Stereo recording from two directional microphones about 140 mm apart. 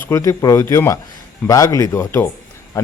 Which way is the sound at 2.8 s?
20° left (ahead or behind).